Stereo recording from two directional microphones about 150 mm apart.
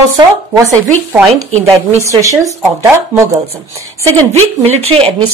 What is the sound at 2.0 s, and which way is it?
Speech, 20° right (ahead or behind).